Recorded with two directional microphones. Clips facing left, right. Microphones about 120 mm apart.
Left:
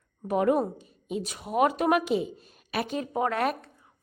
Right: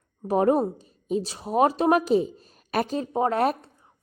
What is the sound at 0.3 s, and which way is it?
A woman's voice, 35° right (ahead or behind).